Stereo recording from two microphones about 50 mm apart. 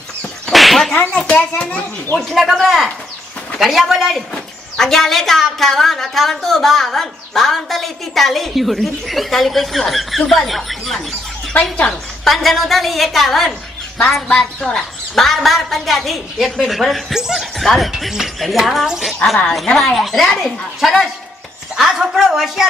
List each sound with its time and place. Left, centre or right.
0.5 s whip: centre
1.3 s a child's voice: left
2.3 s speech: centre
4.3 s speech: centre
11.6 s a woman's voice: centre
12.3 s a woman's voice: centre
17.6 s speech: centre
19.5 s speech: centre